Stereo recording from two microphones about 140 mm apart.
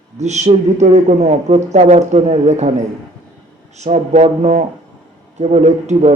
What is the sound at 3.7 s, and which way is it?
Speech, 55° right (ahead or behind).